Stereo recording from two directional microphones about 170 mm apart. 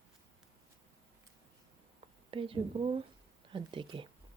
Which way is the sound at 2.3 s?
30° right (ahead or behind).